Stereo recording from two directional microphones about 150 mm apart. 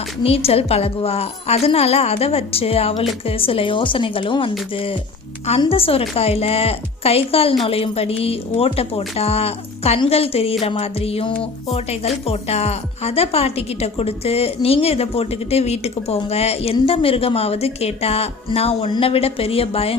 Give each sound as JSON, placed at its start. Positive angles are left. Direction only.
{"t": 0.2, "sound": "a woman's voice", "side_deg": 40}